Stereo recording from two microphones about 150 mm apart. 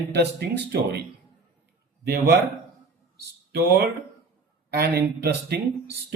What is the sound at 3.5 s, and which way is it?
Speech, 90° right.